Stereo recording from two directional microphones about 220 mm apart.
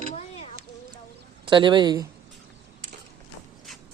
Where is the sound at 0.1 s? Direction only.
30° left (ahead or behind).